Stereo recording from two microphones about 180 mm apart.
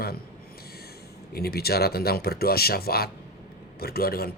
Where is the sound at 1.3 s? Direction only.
60° left (ahead or behind).